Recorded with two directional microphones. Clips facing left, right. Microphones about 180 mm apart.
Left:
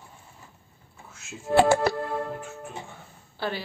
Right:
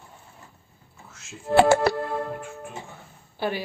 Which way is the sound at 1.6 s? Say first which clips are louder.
Right 2 dB; 75° right (ahead or behind).